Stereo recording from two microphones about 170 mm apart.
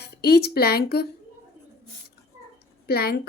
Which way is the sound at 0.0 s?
70° left (ahead or behind).